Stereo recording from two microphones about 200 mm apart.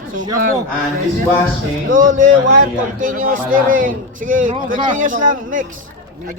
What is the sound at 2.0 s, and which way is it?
A man's voice, 40° right (ahead or behind).